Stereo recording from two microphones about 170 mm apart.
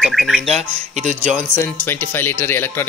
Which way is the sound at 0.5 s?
45° right (ahead or behind).